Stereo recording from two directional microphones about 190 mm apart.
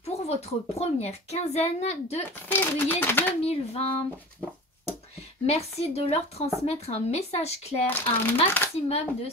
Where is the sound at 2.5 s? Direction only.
10° left (ahead or behind).